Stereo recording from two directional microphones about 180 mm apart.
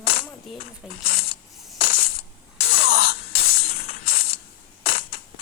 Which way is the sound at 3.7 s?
35° left (ahead or behind).